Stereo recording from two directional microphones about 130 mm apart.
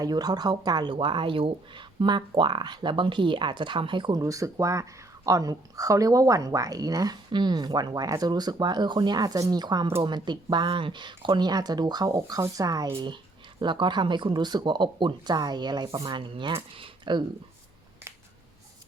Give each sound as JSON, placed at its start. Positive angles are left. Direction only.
{"t": 0.0, "sound": "speech", "side_deg": -30}
{"t": 4.2, "sound": "speech", "side_deg": -25}